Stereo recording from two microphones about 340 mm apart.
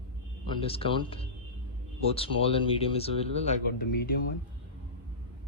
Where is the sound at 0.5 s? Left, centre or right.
Centre.